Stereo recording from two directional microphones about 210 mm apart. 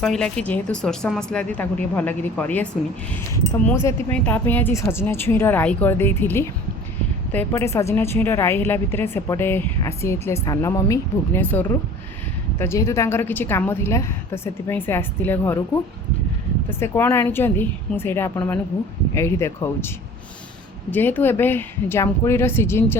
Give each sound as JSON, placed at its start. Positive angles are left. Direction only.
{"t": 0.0, "sound": "a woman's voice", "side_deg": 5}
{"t": 20.9, "sound": "a woman's voice", "side_deg": 10}